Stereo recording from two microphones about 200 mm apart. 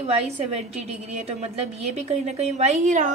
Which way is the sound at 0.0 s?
30° right (ahead or behind).